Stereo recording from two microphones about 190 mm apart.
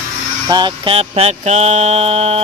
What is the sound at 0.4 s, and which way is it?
Mantra, 20° right (ahead or behind).